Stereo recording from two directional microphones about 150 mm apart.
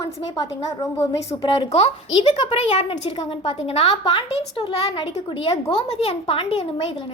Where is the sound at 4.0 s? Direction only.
30° left (ahead or behind).